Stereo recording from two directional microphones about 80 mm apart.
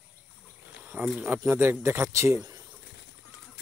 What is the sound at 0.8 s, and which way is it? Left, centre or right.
Insect, right.